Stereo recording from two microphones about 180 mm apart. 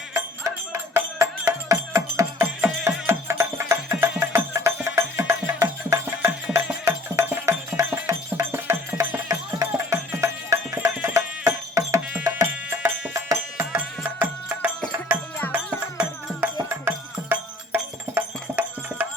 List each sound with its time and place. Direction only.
0.1 s music: 15° right (ahead or behind)